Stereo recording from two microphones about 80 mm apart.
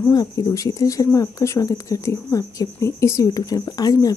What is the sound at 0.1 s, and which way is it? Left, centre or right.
Speech, left.